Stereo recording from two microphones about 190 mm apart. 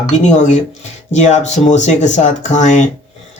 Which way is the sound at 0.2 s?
40° left (ahead or behind).